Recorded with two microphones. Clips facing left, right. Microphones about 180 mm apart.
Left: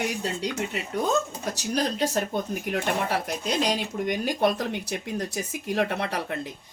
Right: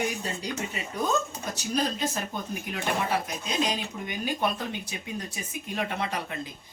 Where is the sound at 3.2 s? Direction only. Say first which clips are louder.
Left 3 dB; 75° left (ahead or behind).